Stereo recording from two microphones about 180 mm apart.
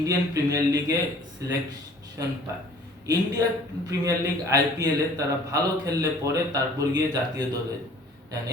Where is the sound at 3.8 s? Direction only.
20° right (ahead or behind).